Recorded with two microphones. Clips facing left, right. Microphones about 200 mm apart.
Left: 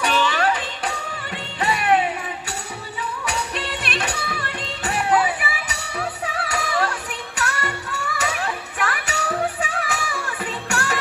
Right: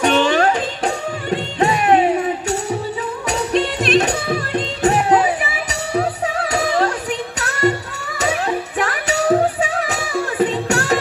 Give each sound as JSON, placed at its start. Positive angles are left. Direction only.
{"t": 0.2, "sound": "music", "side_deg": -45}